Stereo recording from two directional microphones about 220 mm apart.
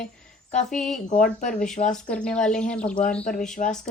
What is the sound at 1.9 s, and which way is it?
A woman's voice, 5° left (ahead or behind).